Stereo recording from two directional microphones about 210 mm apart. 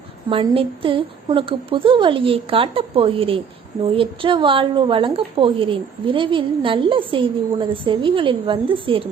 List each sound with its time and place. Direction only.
0.3 s a woman's voice: 25° right (ahead or behind)